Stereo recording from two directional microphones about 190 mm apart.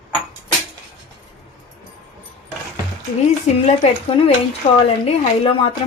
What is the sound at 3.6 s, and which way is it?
Speech, 30° left (ahead or behind).